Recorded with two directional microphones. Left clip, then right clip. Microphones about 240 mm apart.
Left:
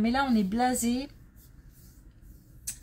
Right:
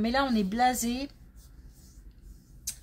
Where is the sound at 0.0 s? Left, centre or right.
Right.